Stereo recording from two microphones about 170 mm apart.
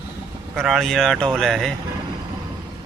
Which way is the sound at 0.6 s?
Centre (ahead or behind).